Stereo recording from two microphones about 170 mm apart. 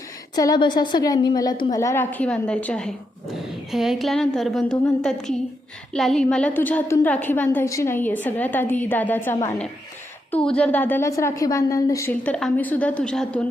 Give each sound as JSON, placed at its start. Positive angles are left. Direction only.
{"t": 0.3, "sound": "a woman's voice", "side_deg": 25}